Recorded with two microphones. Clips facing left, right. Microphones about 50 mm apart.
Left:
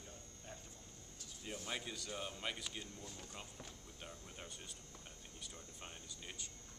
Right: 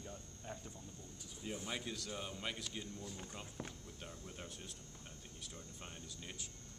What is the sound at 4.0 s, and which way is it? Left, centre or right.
Speech, centre.